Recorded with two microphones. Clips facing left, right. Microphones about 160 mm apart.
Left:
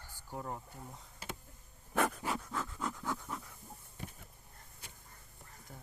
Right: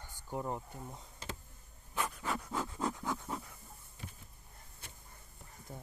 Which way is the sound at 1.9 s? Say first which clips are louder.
Left 6 dB; 55° left (ahead or behind).